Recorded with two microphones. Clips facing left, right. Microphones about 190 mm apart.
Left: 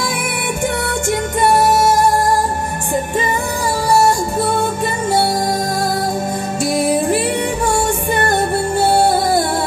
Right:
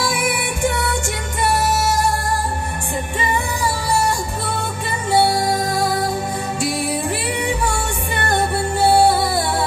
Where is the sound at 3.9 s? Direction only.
45° left (ahead or behind).